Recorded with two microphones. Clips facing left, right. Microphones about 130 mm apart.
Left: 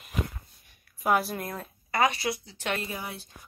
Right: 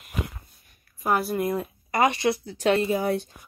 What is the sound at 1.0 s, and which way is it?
Speech, centre (ahead or behind).